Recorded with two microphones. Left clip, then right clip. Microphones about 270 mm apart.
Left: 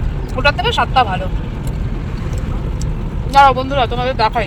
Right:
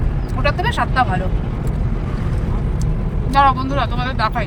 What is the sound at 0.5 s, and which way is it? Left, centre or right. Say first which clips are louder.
Speech: left 4 dB; centre.